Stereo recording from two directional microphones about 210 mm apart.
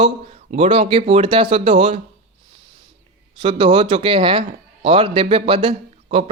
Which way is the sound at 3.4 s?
25° right (ahead or behind).